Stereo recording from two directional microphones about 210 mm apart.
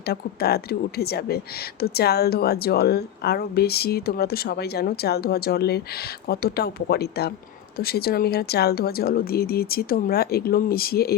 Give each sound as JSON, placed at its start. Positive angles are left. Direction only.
{"t": 0.0, "sound": "a woman's voice", "side_deg": 50}